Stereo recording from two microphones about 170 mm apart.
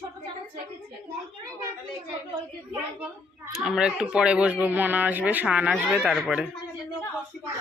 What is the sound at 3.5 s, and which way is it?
Speech, centre (ahead or behind).